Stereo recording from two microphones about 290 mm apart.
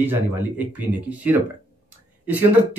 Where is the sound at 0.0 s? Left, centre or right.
Centre.